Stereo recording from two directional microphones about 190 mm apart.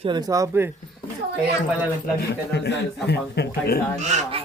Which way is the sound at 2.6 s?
60° left (ahead or behind).